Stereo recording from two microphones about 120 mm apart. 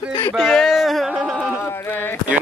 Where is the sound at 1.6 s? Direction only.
20° left (ahead or behind).